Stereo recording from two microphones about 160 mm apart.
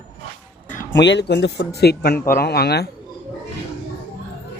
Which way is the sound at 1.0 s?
90° left.